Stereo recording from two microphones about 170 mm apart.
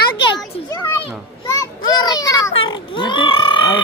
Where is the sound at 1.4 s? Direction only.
20° left (ahead or behind).